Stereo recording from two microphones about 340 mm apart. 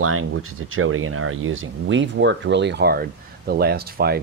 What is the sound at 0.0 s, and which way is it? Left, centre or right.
Speech, right.